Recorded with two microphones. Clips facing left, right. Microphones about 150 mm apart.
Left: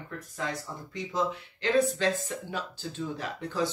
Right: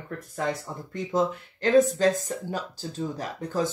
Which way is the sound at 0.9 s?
45° right (ahead or behind).